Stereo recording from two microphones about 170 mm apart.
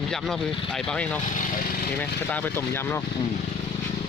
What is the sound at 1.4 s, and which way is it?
Speech, 50° left (ahead or behind).